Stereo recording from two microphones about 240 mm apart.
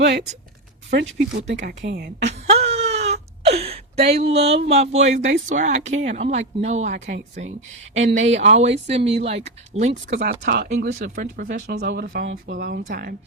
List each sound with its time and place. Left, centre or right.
0.0 s a woman's voice: right
1.5 s a woman's voice: right
2.5 s whimper: right
3.0 s wail: right
4.2 s speech: right
10.1 s a woman's voice: right